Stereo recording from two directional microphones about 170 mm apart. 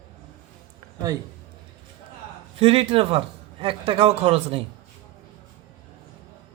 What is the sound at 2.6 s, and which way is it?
A man's voice, 35° right (ahead or behind).